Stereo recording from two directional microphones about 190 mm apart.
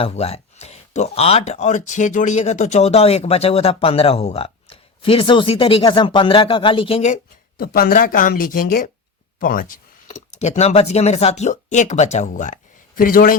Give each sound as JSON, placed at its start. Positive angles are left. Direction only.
{"t": 0.0, "sound": "speech", "side_deg": 30}
{"t": 7.6, "sound": "speech", "side_deg": 50}